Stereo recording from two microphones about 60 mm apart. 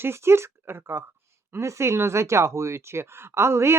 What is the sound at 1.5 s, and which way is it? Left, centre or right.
Speech, right.